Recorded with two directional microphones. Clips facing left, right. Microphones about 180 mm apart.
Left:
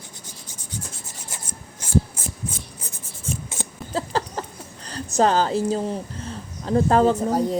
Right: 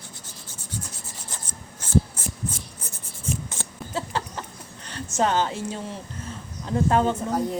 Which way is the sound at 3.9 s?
35° left (ahead or behind).